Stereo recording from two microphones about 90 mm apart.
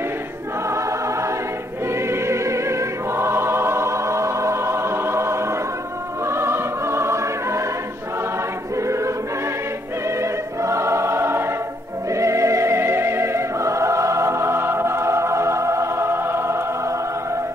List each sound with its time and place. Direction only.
0.7 s choir: 35° right (ahead or behind)
6.2 s music: 30° right (ahead or behind)
8.7 s choir: 35° right (ahead or behind)
10.0 s music: 30° right (ahead or behind)